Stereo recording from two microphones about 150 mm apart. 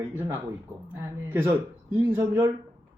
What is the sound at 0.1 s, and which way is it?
Speech, 15° right (ahead or behind).